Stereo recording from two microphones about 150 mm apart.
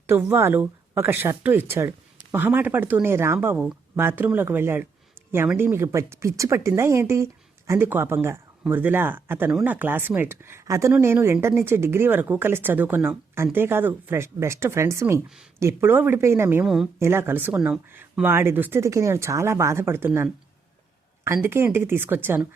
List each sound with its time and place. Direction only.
0.1 s speech: 15° right (ahead or behind)
16.6 s a woman's voice: centre (ahead or behind)
17.0 s speech: 15° right (ahead or behind)